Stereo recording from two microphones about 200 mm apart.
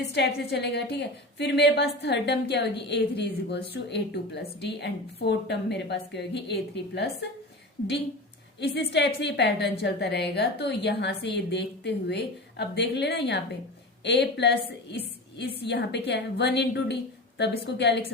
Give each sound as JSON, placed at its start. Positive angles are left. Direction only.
{"t": 0.1, "sound": "a woman's voice", "side_deg": 55}
{"t": 8.6, "sound": "a woman's voice", "side_deg": 55}